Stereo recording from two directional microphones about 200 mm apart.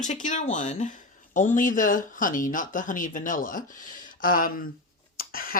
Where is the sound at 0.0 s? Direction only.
40° left (ahead or behind).